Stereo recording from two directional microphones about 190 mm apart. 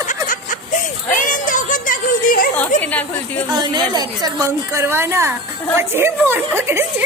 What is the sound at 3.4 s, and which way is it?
Speech, 20° right (ahead or behind).